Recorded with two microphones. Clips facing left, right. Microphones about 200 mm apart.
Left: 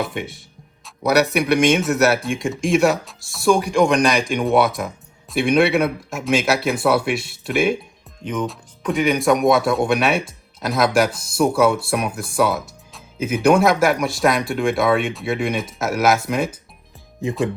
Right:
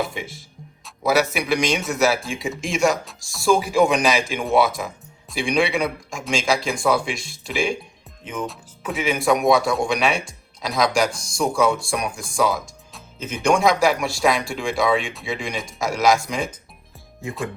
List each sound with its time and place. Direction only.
0.0 s speech: centre (ahead or behind)
7.0 s speech: 60° left (ahead or behind)
7.4 s speech: 5° left (ahead or behind)